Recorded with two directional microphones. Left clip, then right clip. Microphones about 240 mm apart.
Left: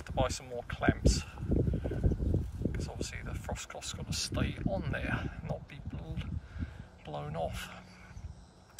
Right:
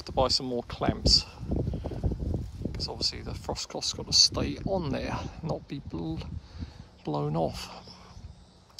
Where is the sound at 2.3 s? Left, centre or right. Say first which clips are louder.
Even; centre.